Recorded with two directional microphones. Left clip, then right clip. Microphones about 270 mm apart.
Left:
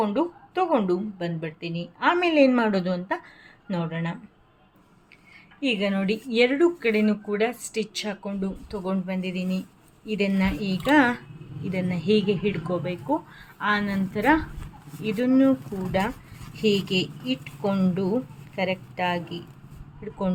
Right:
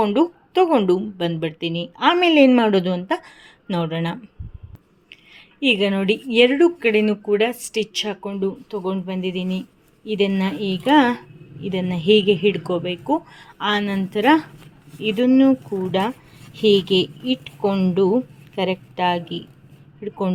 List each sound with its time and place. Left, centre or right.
0.0 s speech: right
5.6 s speech: right
9.4 s speech: centre
10.2 s speech: right
16.6 s speech: right
16.8 s a woman's voice: right